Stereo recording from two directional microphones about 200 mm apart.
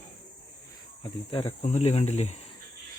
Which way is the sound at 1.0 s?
25° left (ahead or behind).